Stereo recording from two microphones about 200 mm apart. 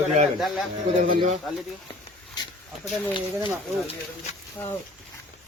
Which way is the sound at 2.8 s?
25° left (ahead or behind).